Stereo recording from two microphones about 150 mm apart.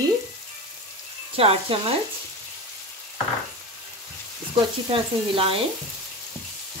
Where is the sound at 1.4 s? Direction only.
40° right (ahead or behind).